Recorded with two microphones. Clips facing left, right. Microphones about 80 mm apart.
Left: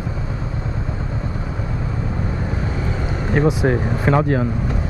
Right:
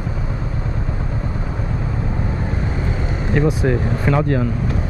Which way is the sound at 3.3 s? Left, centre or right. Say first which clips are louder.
Left 1 dB; left.